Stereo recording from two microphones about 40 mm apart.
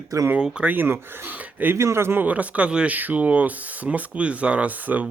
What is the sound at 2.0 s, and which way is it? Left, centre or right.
Speech, right.